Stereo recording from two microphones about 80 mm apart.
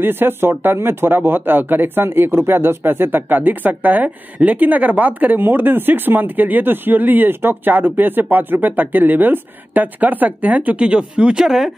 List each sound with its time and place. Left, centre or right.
0.0 s speech: right; by 11.7 s centre